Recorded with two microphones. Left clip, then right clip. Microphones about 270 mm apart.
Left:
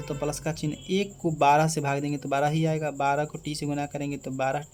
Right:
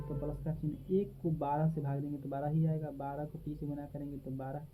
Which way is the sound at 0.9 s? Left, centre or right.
Left.